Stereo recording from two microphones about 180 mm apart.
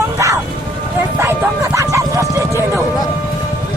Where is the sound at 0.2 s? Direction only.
15° right (ahead or behind).